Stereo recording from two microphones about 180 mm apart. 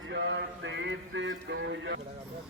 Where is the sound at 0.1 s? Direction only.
75° right (ahead or behind).